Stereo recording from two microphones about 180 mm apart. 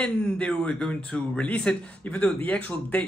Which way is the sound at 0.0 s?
5° left (ahead or behind).